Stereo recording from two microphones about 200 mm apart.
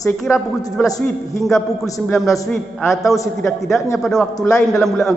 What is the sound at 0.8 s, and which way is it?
Speech, 15° left (ahead or behind).